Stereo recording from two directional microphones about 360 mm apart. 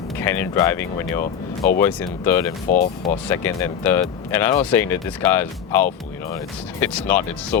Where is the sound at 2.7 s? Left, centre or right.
Left.